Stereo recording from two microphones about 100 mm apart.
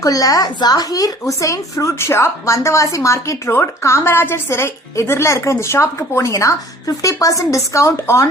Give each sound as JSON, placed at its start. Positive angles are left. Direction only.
{"t": 0.0, "sound": "a woman's voice", "side_deg": 35}